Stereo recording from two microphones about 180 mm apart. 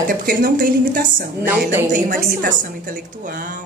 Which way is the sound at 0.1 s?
50° right (ahead or behind).